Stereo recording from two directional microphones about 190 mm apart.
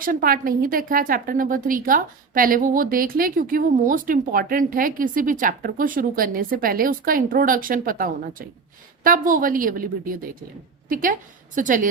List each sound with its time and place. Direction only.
0.0 s a woman's voice: 50° right (ahead or behind)